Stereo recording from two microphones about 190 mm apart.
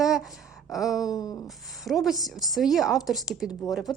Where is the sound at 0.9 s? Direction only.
20° left (ahead or behind).